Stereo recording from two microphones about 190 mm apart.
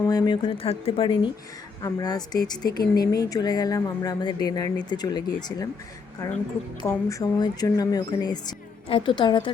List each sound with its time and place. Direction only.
0.0 s speech: 20° left (ahead or behind)
6.8 s speech: 15° left (ahead or behind)